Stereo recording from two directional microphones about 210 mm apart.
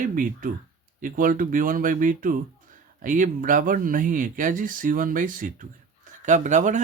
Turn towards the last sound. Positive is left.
turn(degrees=-35)  # may be behind; listen again after turning